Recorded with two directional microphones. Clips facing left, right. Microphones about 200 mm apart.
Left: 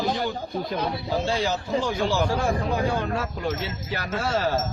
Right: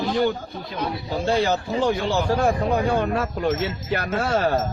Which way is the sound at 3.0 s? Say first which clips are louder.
Right 4 dB; 60° right (ahead or behind).